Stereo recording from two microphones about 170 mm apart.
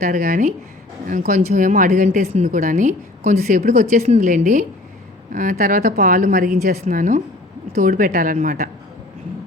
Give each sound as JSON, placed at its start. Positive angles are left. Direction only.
{"t": 0.0, "sound": "a woman's voice", "side_deg": -60}
{"t": 6.9, "sound": "a woman's voice", "side_deg": -50}